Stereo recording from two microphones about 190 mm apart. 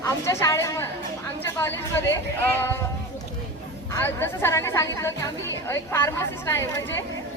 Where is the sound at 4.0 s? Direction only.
10° left (ahead or behind).